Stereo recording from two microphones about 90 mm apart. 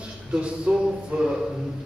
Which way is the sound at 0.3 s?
10° right (ahead or behind).